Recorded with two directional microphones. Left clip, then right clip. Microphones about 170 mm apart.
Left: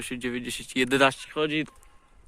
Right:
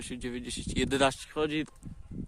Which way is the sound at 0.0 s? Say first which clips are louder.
Left 6 dB; 15° right (ahead or behind).